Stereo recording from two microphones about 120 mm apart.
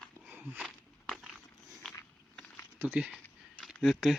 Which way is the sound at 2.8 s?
15° right (ahead or behind).